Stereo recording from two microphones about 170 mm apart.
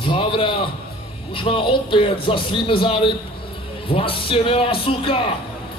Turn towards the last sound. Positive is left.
turn(degrees=30)  # may be behind; listen again after turning